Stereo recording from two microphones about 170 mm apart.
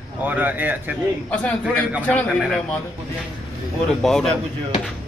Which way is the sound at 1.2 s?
10° left (ahead or behind).